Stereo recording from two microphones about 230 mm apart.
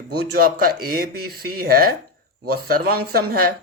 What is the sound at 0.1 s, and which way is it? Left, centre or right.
Speech, right.